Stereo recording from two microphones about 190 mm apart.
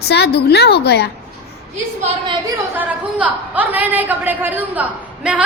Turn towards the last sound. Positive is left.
turn(degrees=-5)  # may be behind; listen again after turning